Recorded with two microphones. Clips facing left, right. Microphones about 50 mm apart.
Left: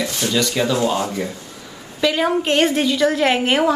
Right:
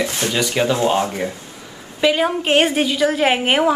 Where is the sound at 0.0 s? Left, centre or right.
Right.